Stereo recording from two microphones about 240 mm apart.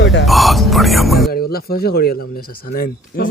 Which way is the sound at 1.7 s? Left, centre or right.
Left.